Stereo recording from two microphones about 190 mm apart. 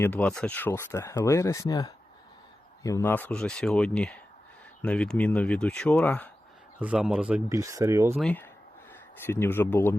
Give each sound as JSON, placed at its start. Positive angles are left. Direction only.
{"t": 0.0, "sound": "speech", "side_deg": 10}
{"t": 6.7, "sound": "speech", "side_deg": -5}
{"t": 7.6, "sound": "speech", "side_deg": -15}
{"t": 8.1, "sound": "speech", "side_deg": 5}